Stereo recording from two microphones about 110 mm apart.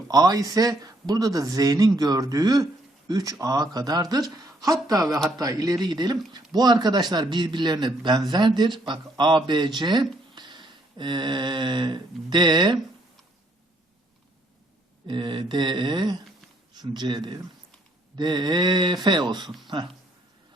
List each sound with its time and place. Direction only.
0.1 s a man's voice: 35° right (ahead or behind)
15.0 s a man's voice: 45° right (ahead or behind)